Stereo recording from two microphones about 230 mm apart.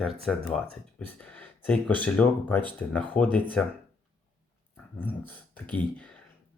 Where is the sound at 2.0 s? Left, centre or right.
Centre.